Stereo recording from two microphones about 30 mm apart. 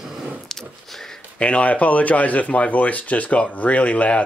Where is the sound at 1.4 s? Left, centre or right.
Left.